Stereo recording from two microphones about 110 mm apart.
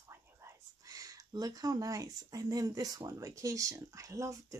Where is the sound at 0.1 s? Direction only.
25° right (ahead or behind).